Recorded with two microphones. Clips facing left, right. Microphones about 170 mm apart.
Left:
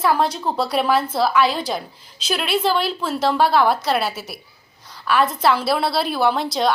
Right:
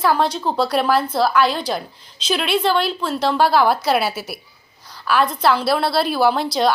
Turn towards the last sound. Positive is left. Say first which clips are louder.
# right 2 dB
turn(degrees=0)  # may be behind; listen again after turning